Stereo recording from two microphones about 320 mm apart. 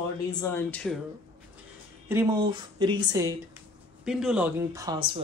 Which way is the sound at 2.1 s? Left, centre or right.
Centre.